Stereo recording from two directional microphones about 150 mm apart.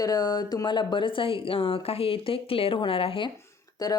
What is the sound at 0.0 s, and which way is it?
A woman's voice, 25° left (ahead or behind).